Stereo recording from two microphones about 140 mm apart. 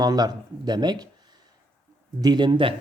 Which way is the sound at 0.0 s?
25° right (ahead or behind).